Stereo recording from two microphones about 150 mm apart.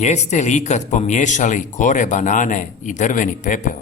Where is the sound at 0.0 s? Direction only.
50° left (ahead or behind).